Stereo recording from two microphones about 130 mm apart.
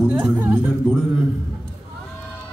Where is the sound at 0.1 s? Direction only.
10° right (ahead or behind).